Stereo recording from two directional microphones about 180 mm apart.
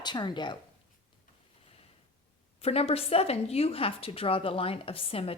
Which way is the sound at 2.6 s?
35° left (ahead or behind).